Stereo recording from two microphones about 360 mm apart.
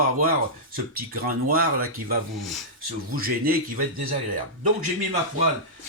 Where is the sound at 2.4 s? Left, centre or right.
Centre.